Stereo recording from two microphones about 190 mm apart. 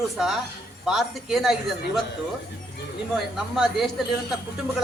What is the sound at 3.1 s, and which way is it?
Speech, centre (ahead or behind).